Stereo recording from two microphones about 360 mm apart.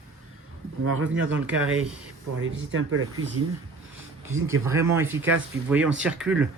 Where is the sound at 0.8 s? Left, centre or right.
Right.